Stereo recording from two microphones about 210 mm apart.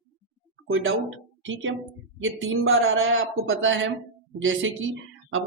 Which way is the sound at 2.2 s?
70° right (ahead or behind).